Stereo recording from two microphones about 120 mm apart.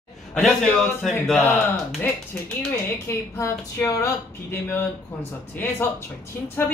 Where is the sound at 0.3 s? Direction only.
5° left (ahead or behind).